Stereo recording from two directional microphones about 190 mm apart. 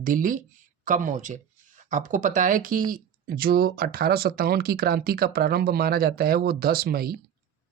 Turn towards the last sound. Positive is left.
turn(degrees=-55)  # may be behind; listen again after turning